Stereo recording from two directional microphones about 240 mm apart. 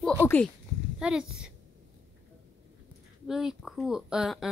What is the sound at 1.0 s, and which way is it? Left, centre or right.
Speech, centre.